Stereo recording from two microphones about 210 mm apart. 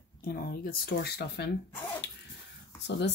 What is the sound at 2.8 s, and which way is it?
Speech, 55° left (ahead or behind).